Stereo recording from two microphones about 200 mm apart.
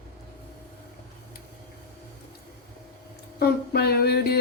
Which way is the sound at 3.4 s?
55° left (ahead or behind).